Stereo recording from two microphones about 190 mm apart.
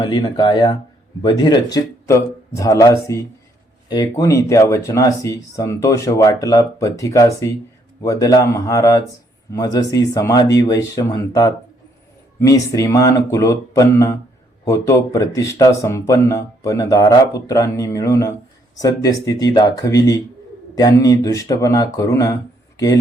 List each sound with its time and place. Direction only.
0.0 s speech: 20° left (ahead or behind)